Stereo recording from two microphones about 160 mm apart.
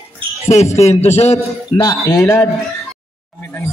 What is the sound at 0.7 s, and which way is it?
Speech, 40° left (ahead or behind).